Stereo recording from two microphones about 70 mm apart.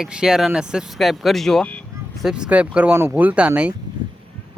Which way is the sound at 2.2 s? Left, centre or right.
Centre.